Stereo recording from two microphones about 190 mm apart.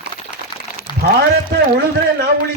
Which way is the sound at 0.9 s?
25° left (ahead or behind).